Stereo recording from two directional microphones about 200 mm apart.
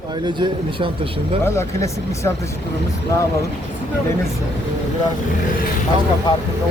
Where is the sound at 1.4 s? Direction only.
15° left (ahead or behind).